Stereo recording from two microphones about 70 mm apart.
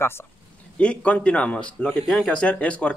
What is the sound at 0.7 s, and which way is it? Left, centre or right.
Speech, centre.